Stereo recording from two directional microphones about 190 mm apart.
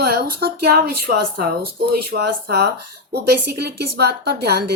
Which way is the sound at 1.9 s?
60° right (ahead or behind).